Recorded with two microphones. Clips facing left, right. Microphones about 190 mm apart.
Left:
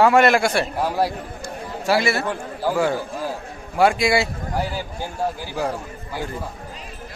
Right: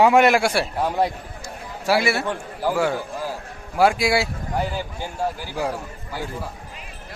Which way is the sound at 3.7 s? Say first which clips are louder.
Left 1 dB; 5° right (ahead or behind).